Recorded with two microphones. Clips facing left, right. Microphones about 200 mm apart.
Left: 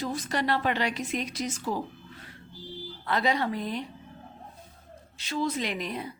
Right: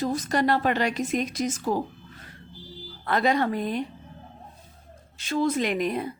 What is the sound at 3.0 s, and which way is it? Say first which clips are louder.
Speech: right 4 dB; 50° right (ahead or behind).